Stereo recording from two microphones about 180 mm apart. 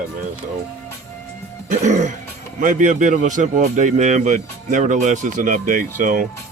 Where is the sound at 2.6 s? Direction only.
45° right (ahead or behind).